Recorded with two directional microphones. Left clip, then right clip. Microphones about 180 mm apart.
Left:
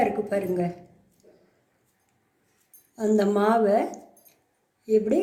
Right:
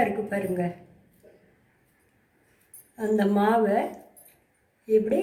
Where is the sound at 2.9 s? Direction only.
40° left (ahead or behind).